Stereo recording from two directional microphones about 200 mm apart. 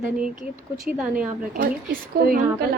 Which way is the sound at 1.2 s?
45° right (ahead or behind).